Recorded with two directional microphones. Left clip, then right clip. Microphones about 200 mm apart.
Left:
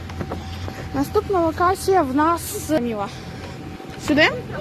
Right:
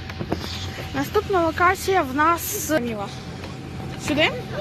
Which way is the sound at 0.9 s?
10° left (ahead or behind).